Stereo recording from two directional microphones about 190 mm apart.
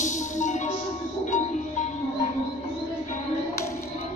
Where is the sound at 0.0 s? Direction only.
40° left (ahead or behind).